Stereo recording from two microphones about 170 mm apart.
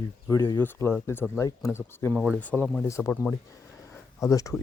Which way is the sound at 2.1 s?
5° right (ahead or behind).